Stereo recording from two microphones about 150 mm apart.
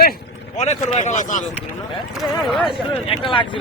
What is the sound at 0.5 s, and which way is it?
Speech, 50° left (ahead or behind).